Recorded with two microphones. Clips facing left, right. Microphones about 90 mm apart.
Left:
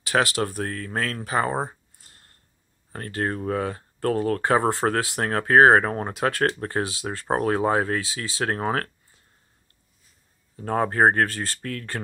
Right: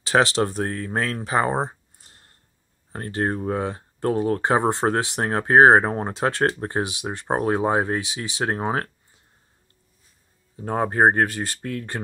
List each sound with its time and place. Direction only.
0.0 s speech: 25° right (ahead or behind)
10.5 s speech: 15° right (ahead or behind)